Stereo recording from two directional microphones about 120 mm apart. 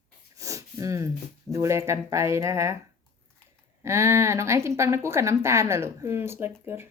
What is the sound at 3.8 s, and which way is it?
Speech, 25° right (ahead or behind).